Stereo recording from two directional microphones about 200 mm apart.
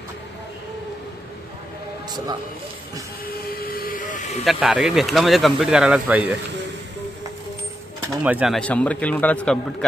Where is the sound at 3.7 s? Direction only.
45° left (ahead or behind).